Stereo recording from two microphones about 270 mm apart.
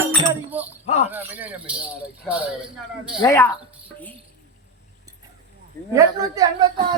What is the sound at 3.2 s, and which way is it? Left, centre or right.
Speech, centre.